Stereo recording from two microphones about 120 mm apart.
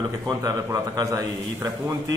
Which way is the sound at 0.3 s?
30° right (ahead or behind).